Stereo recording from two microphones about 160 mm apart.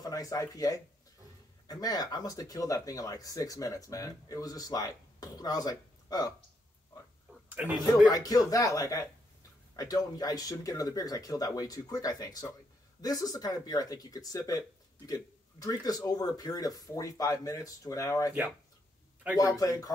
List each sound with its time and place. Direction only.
0.0 s speech: 20° left (ahead or behind)
7.4 s a sound: 10° right (ahead or behind)
8.1 s speech: 25° left (ahead or behind)
19.3 s speech: 20° left (ahead or behind)